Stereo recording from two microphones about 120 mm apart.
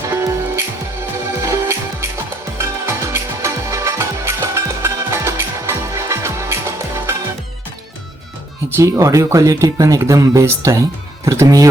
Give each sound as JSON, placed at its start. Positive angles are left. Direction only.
{"t": 0.1, "sound": "music", "side_deg": -25}
{"t": 8.7, "sound": "speech", "side_deg": -25}